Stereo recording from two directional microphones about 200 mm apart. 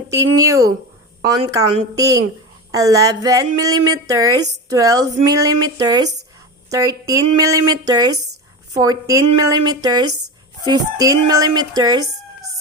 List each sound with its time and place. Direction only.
0.1 s a woman's voice: 15° right (ahead or behind)